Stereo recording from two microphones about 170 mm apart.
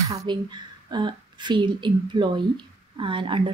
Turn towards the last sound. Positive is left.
turn(degrees=-30)  # may be behind; listen again after turning